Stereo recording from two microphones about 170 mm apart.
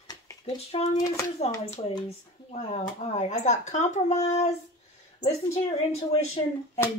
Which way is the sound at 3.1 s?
40° left (ahead or behind).